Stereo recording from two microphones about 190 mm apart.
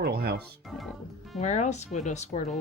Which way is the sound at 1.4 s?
40° left (ahead or behind).